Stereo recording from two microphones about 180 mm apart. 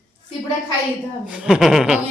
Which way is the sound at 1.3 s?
5° right (ahead or behind).